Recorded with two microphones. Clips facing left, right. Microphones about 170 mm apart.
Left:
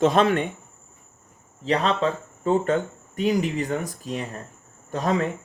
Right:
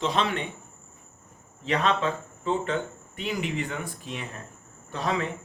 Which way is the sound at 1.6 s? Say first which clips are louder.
Left 3 dB; 35° left (ahead or behind).